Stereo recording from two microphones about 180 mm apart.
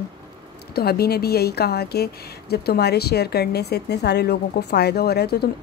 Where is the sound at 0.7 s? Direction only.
60° left (ahead or behind).